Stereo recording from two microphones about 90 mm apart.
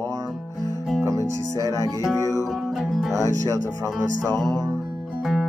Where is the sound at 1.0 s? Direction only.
40° right (ahead or behind).